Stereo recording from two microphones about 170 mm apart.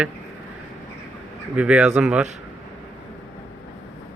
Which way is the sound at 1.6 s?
5° right (ahead or behind).